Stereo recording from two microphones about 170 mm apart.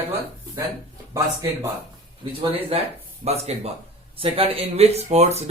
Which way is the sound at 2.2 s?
25° right (ahead or behind).